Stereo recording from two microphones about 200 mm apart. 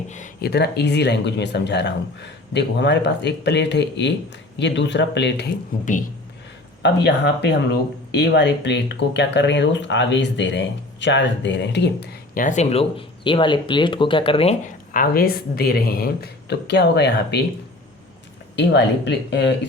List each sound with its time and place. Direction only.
0.4 s speech: 55° left (ahead or behind)
5.8 s a man's voice: 40° left (ahead or behind)
6.8 s speech: 55° left (ahead or behind); by 14.5 s 25° left (ahead or behind)
14.9 s speech: 50° left (ahead or behind)
18.5 s speech: 60° left (ahead or behind)